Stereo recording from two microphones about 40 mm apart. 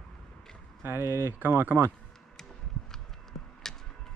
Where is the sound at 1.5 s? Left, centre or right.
Right.